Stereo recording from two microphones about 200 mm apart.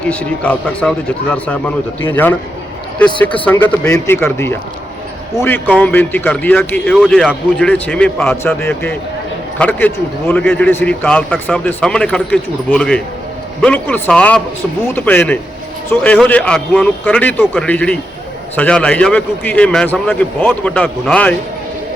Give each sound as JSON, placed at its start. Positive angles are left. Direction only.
{"t": 0.1, "sound": "a man's voice", "side_deg": 5}